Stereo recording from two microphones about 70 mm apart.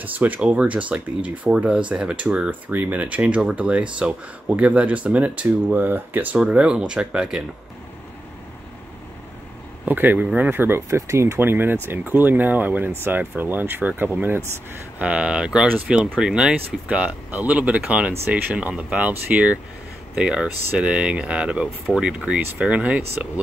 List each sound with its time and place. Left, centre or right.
0.0 s speech: right
9.8 s speech: right